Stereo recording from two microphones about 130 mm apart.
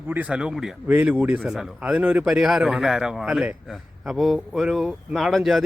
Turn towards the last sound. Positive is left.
turn(degrees=0)  # may be behind; listen again after turning